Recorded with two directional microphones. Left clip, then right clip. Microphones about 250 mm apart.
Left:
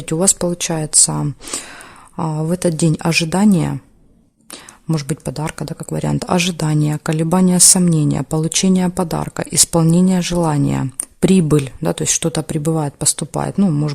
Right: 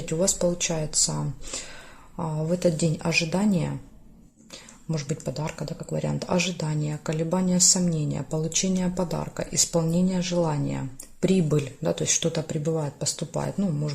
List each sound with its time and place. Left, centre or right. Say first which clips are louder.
0.0 s speech: left 6 dB; left
4.9 s speech: left 8 dB; left